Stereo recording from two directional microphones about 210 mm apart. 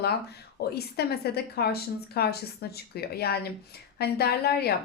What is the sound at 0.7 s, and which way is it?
Speech, 50° left (ahead or behind).